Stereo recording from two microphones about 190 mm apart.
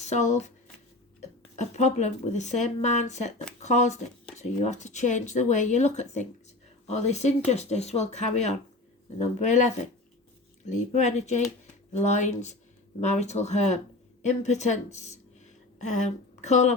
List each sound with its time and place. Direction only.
0.0 s a woman's voice: 40° left (ahead or behind)